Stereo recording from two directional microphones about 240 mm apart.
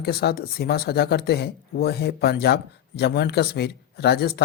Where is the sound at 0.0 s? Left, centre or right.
Left.